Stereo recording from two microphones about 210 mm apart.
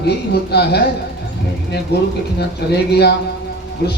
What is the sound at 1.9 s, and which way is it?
Speech, 50° left (ahead or behind).